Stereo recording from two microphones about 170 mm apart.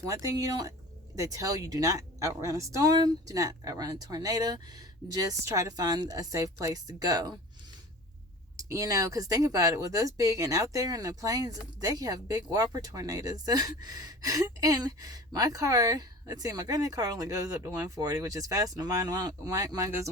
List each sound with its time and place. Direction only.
0.0 s speech: 20° right (ahead or behind)
8.5 s speech: 20° right (ahead or behind)